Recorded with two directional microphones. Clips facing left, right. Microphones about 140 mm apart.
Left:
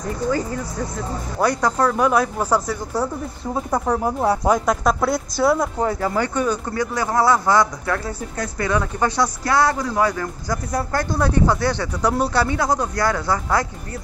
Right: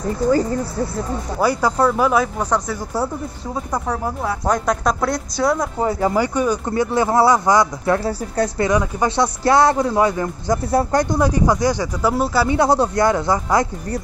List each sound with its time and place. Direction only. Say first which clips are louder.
1.4 s speech: right 2 dB; 5° right (ahead or behind)
5.9 s speech: right 3 dB; 15° right (ahead or behind)
6.7 s speech: right 5 dB; 25° right (ahead or behind)
8.6 s speech: right 2 dB; 15° right (ahead or behind)
12.4 s speech: right 5 dB; 25° right (ahead or behind)